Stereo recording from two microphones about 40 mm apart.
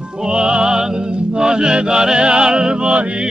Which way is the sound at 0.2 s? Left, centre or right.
Right.